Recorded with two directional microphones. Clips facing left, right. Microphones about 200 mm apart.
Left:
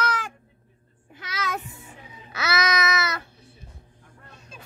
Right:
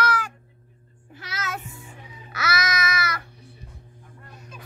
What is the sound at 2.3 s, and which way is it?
Babbling, 20° left (ahead or behind).